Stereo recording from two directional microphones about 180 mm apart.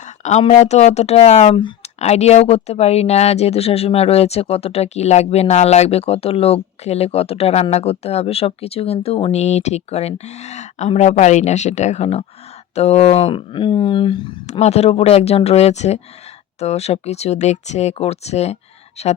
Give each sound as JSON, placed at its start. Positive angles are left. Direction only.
{"t": 0.2, "sound": "speech", "side_deg": 40}